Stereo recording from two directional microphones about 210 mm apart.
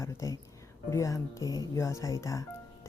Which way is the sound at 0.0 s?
15° left (ahead or behind).